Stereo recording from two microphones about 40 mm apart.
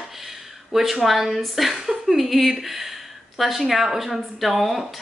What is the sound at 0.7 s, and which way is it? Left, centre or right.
Speech, centre.